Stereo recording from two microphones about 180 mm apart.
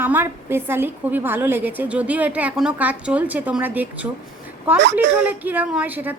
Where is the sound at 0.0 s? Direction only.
10° right (ahead or behind).